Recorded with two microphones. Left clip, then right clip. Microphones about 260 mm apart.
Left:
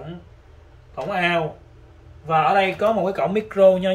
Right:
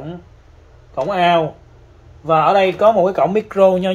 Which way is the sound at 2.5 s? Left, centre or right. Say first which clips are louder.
Right 6 dB; centre.